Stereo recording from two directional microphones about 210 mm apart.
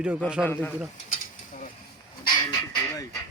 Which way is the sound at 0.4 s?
10° left (ahead or behind).